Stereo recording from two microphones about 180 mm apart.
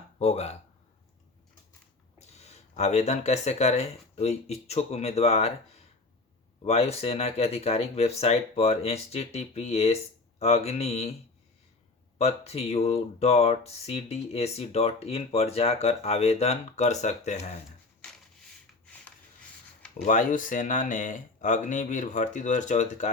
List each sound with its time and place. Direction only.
0.2 s speech: 35° left (ahead or behind)
2.1 s speech: 35° left (ahead or behind)
6.7 s speech: 35° left (ahead or behind)
12.1 s speech: 35° left (ahead or behind)
20.1 s speech: 45° left (ahead or behind)